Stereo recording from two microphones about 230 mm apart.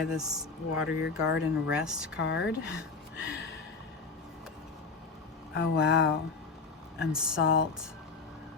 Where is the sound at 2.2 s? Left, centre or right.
Left.